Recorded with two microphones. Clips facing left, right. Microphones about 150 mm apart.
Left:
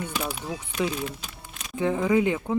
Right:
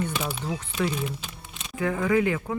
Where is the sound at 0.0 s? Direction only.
10° left (ahead or behind).